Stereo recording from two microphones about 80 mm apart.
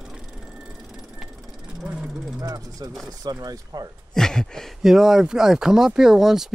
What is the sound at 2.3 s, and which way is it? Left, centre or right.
Speech, right.